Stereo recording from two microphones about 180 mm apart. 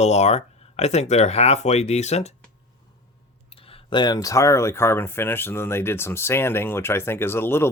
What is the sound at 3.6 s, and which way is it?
Speech, 30° left (ahead or behind).